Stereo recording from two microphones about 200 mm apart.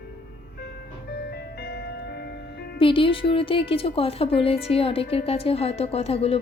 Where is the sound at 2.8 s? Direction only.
25° left (ahead or behind).